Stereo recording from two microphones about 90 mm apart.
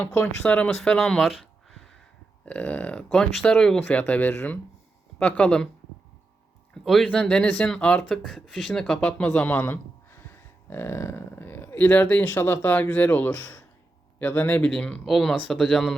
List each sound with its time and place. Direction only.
0.0 s speech: 20° left (ahead or behind)
0.7 s speech: 5° left (ahead or behind)
1.3 s a sound: 5° right (ahead or behind)
2.4 s speech: 15° left (ahead or behind)
6.8 s speech: centre (ahead or behind)
8.2 s speech: centre (ahead or behind)
9.5 s a sound: 20° left (ahead or behind)
10.7 s speech: 25° left (ahead or behind)
14.6 s speech: 10° left (ahead or behind)